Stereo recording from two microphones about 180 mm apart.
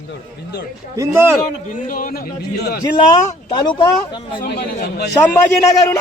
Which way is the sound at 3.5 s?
25° left (ahead or behind).